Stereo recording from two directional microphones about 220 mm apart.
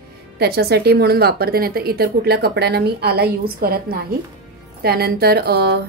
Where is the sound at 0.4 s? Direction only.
45° right (ahead or behind).